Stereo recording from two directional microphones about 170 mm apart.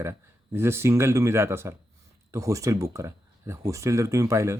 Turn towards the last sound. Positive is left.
turn(degrees=-15)  # may be behind; listen again after turning